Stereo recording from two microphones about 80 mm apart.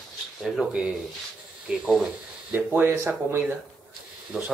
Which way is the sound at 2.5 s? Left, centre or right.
Right.